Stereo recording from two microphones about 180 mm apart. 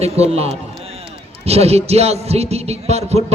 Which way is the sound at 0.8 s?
35° right (ahead or behind).